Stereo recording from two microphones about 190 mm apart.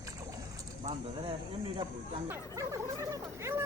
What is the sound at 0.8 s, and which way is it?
Speech, 15° right (ahead or behind).